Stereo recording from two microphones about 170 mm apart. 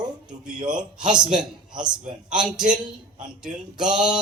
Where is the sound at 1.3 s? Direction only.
25° right (ahead or behind).